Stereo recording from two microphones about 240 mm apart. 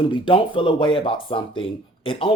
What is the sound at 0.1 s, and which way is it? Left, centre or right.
Speech, left.